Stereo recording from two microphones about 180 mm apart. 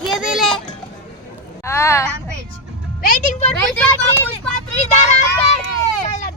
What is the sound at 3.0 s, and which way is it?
Music, 45° left (ahead or behind).